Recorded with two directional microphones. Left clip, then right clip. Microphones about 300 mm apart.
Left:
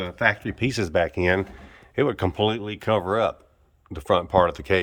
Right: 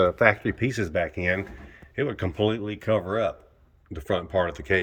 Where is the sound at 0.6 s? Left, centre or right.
Centre.